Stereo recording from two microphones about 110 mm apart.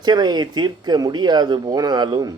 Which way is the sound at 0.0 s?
40° right (ahead or behind).